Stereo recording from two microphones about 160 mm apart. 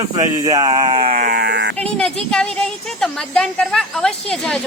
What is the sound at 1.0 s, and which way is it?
Buzzer, 60° right (ahead or behind).